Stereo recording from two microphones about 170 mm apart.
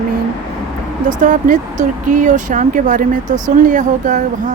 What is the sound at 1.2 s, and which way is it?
Speech, 50° right (ahead or behind).